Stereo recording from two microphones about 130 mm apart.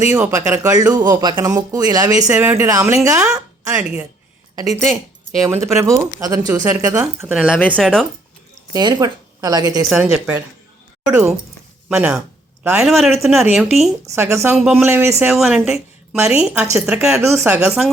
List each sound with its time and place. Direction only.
0.0 s speech: 20° right (ahead or behind)
2.3 s speech: 15° right (ahead or behind)
3.3 s a sound: 25° right (ahead or behind)
4.5 s speech: 25° right (ahead or behind)
7.8 s speech: 5° left (ahead or behind)
8.7 s speech: 30° right (ahead or behind)
9.9 s speech: 10° right (ahead or behind)
14.1 s speech: 20° right (ahead or behind)
14.5 s speech: centre (ahead or behind)
14.8 s speech: 15° right (ahead or behind)
15.2 s speech: 5° right (ahead or behind)